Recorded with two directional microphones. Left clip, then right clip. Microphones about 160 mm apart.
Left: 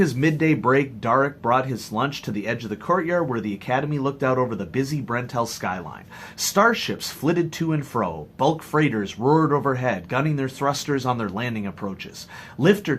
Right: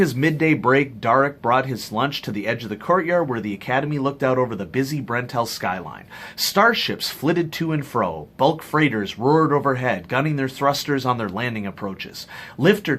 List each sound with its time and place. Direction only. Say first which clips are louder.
0.0 s speech: right 2 dB; 35° right (ahead or behind)